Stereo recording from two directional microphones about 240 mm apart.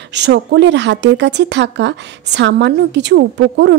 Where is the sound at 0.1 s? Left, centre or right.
Right.